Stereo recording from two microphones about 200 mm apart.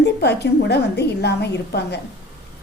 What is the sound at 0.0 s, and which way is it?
A woman's voice, 55° left (ahead or behind).